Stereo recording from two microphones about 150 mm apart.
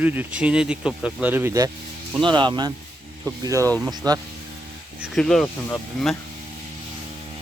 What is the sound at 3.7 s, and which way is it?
Speech, 5° left (ahead or behind).